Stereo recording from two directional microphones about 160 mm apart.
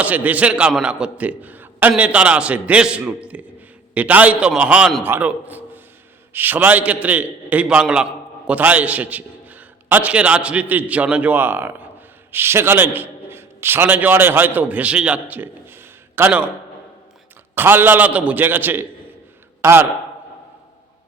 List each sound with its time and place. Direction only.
0.0 s a man's voice: 10° right (ahead or behind)
17.5 s a man's voice: 15° right (ahead or behind)